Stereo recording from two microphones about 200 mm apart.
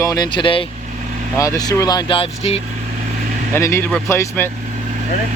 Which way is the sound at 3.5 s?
15° left (ahead or behind).